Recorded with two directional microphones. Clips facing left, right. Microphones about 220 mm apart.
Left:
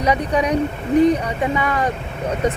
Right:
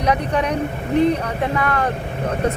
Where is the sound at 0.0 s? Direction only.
10° left (ahead or behind).